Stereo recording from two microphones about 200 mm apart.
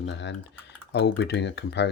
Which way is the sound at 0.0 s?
65° left (ahead or behind).